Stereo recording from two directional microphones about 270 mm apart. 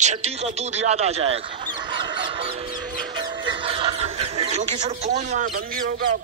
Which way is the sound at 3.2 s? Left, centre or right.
Centre.